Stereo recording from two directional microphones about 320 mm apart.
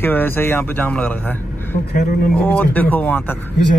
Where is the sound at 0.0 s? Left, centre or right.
Centre.